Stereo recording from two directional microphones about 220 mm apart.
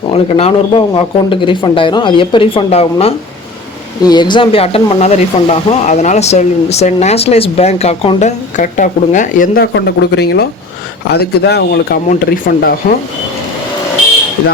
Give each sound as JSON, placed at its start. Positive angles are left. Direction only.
{"t": 0.1, "sound": "speech", "side_deg": 30}
{"t": 9.7, "sound": "speech", "side_deg": 50}